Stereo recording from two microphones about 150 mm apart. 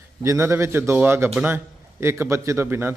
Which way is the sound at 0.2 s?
20° right (ahead or behind).